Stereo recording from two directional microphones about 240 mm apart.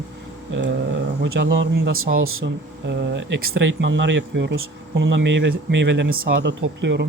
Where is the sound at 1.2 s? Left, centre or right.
Right.